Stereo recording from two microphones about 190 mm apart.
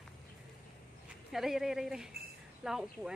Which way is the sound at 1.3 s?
Centre (ahead or behind).